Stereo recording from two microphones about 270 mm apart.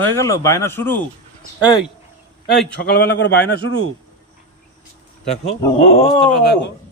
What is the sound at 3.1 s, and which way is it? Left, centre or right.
Speech, left.